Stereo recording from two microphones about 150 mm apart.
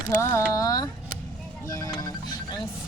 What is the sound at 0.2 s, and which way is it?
Speech, 20° left (ahead or behind).